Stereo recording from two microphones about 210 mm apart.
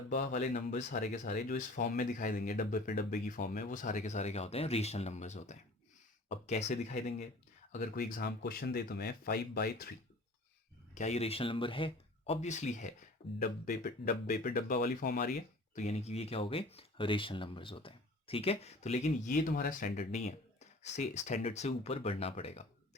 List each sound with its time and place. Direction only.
0.1 s speech: 45° left (ahead or behind)
10.9 s speech: 35° left (ahead or behind)
13.4 s speech: 45° left (ahead or behind); by 22.6 s 30° left (ahead or behind)